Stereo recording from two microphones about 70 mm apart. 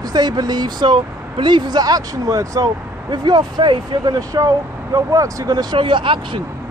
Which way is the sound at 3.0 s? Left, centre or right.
Right.